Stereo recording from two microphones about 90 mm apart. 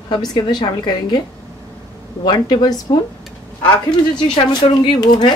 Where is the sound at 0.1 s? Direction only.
50° left (ahead or behind).